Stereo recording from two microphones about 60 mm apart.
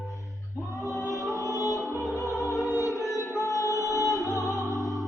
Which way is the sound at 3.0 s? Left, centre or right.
Left.